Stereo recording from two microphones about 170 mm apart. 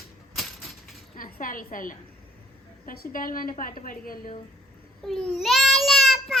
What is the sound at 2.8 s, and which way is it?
A woman's voice, 60° left (ahead or behind).